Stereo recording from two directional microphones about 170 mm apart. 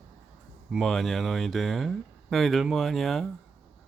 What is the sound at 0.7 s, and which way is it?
Speech, centre (ahead or behind).